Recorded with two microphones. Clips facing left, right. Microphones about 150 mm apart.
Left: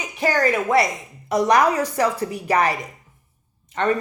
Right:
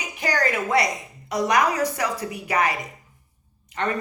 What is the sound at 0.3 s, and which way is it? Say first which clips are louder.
A woman's voice: left 4 dB; 20° left (ahead or behind).